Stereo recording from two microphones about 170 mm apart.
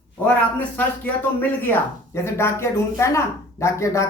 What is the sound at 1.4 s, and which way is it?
A man's voice, 10° left (ahead or behind).